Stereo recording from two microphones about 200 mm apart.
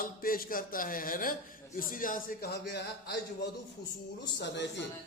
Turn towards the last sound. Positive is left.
turn(degrees=60)  # may be behind; listen again after turning